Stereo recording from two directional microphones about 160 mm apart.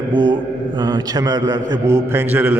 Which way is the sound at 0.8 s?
25° right (ahead or behind).